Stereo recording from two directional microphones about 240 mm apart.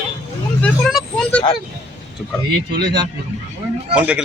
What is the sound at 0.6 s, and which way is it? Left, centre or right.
Speech, centre.